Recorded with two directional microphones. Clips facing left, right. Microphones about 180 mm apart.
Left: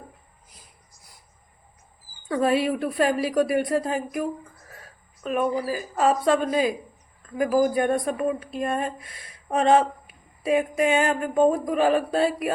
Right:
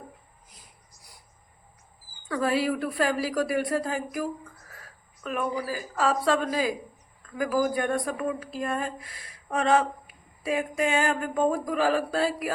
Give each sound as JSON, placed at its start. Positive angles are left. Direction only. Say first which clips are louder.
{"t": 2.3, "sound": "a woman's voice", "louder": "left 4 dB", "side_deg": 20}